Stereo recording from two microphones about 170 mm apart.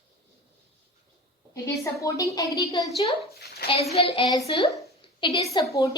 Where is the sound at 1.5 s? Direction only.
20° left (ahead or behind).